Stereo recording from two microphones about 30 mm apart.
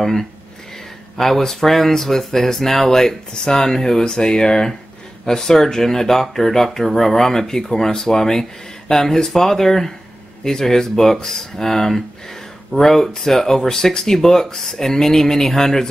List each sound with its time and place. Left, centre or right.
0.0 s speech: centre
4.0 s speech: left
5.2 s speech: centre